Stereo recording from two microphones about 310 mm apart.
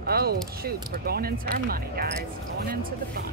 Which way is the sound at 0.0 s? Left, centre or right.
Right.